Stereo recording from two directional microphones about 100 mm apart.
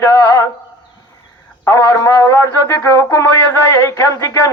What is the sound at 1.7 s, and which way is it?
A man's voice, 35° left (ahead or behind).